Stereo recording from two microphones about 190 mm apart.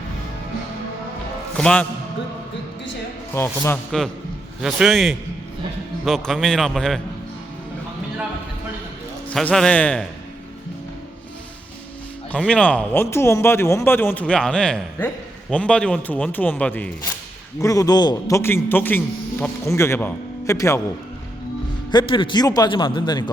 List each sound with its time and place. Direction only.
1.5 s a man's voice: 5° left (ahead or behind)
3.3 s a man's voice: 10° left (ahead or behind)
4.6 s a man's voice: centre (ahead or behind)
9.3 s a man's voice: 5° left (ahead or behind)
12.3 s a man's voice: 5° left (ahead or behind)
17.6 s a man's voice: 15° left (ahead or behind)
21.9 s a man's voice: 25° left (ahead or behind)